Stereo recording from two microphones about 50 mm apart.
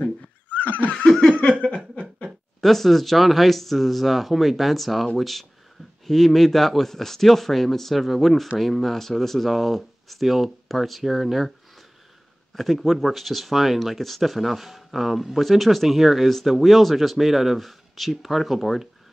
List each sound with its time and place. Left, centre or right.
0.0 s neigh: left
0.9 s snicker: centre
2.2 s speech: centre
12.5 s speech: centre